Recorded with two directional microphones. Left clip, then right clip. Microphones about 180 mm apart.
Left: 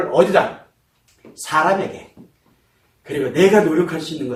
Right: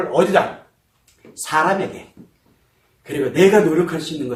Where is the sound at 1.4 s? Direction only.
15° right (ahead or behind).